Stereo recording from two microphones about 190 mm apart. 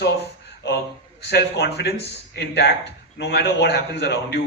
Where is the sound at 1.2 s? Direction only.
60° left (ahead or behind).